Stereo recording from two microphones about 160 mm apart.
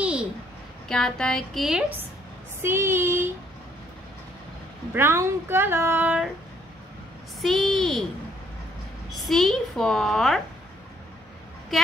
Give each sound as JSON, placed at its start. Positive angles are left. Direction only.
{"t": 0.0, "sound": "a sound", "side_deg": -5}
{"t": 0.8, "sound": "a woman's voice", "side_deg": 5}
{"t": 4.9, "sound": "speech", "side_deg": -15}
{"t": 7.4, "sound": "a woman's voice", "side_deg": 0}
{"t": 9.1, "sound": "a woman's voice", "side_deg": 0}
{"t": 11.7, "sound": "a woman's voice", "side_deg": 0}